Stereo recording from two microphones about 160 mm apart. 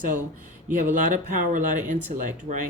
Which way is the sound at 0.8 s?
55° right (ahead or behind).